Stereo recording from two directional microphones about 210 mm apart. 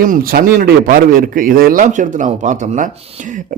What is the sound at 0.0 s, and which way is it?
A man's voice, 40° right (ahead or behind).